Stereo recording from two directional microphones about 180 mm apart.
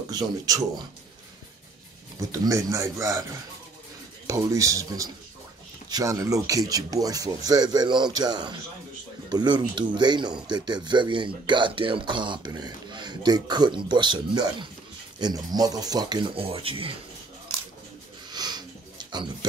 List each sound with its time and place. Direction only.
0.1 s speech: 20° right (ahead or behind)
2.1 s speech: 20° right (ahead or behind)
4.3 s speech: 20° right (ahead or behind)
18.3 s sniff: 25° right (ahead or behind)